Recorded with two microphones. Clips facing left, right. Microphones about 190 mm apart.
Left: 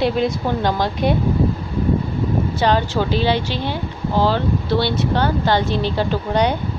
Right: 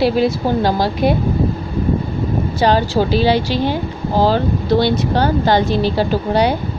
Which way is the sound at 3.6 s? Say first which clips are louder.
Right 5 dB; 40° right (ahead or behind).